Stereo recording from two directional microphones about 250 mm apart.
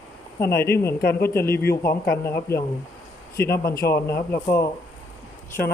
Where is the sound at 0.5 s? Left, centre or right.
Left.